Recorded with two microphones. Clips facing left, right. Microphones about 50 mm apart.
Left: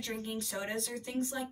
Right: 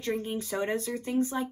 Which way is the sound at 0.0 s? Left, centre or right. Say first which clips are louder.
Right 7 dB; right.